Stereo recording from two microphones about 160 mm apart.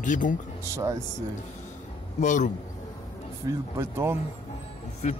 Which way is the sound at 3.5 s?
15° right (ahead or behind).